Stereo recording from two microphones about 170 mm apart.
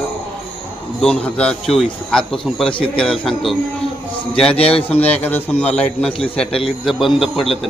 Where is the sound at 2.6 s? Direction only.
30° left (ahead or behind).